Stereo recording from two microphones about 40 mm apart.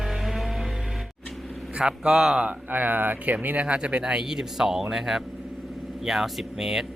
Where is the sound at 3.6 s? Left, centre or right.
Right; by 6.9 s centre.